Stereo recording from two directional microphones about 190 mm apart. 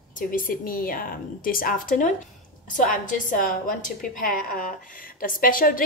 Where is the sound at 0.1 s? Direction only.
45° left (ahead or behind).